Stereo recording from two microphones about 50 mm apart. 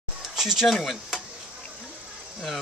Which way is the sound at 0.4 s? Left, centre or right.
Centre.